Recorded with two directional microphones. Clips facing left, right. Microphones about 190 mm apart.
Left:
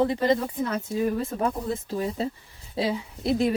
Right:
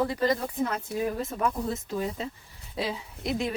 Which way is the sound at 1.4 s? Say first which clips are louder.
Left 2 dB; 30° left (ahead or behind).